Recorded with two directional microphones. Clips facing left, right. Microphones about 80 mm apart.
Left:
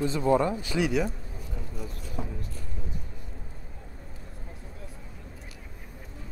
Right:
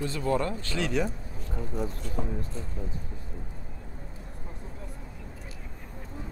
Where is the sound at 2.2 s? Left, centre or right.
Centre.